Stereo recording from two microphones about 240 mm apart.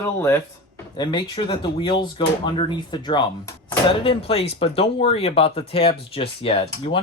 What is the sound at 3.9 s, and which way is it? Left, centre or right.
Speech, left.